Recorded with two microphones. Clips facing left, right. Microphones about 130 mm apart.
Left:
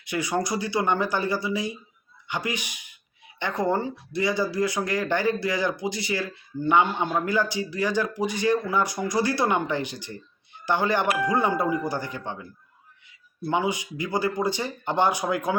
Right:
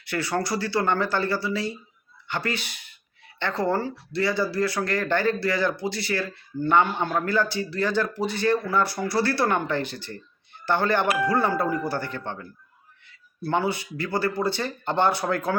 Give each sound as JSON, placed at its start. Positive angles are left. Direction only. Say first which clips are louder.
{"t": 0.0, "sound": "speech", "louder": "even", "side_deg": 15}